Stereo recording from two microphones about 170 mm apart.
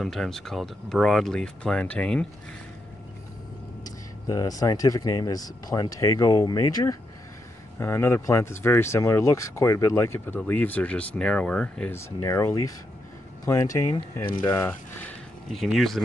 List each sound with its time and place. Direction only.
0.0 s speech: centre (ahead or behind)
3.8 s speech: 20° left (ahead or behind)
15.5 s speech: centre (ahead or behind)